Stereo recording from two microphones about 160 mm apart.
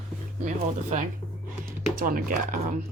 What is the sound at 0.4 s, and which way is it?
Speech, 50° right (ahead or behind).